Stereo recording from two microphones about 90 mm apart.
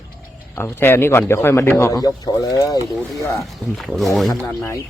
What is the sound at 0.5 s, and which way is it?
Speech, 25° left (ahead or behind).